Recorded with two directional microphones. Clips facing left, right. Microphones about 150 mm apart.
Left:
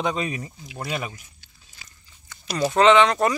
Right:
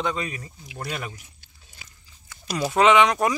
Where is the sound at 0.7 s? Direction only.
5° left (ahead or behind).